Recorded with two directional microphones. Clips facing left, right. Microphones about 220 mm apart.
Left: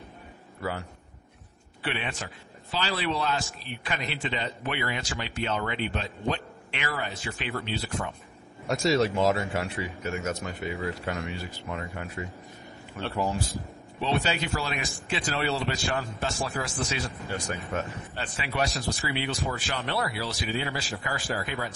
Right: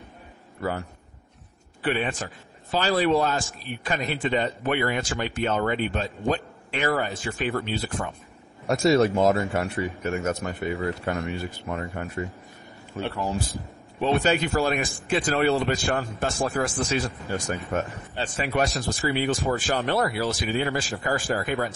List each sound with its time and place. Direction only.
0.6 s a man's voice: 50° right (ahead or behind)
13.0 s speech: 25° right (ahead or behind)
14.0 s a man's voice: 50° right (ahead or behind)